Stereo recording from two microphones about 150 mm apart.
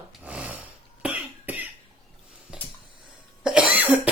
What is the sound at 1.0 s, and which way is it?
Cough, 10° right (ahead or behind).